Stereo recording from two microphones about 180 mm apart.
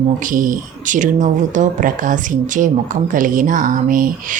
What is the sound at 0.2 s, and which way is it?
Speech, 45° right (ahead or behind).